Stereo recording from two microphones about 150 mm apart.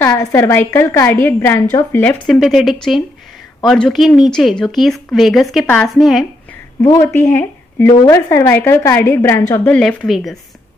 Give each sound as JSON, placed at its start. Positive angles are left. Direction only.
{"t": 0.0, "sound": "a woman's voice", "side_deg": 15}
{"t": 2.2, "sound": "speech", "side_deg": 0}
{"t": 6.8, "sound": "a woman's voice", "side_deg": 20}
{"t": 9.7, "sound": "speech", "side_deg": 5}